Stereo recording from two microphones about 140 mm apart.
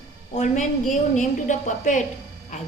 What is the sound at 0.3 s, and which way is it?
A woman's voice, 60° left (ahead or behind).